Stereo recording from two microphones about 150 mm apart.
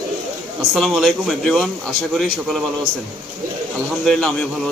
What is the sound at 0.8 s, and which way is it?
A man's voice, centre (ahead or behind).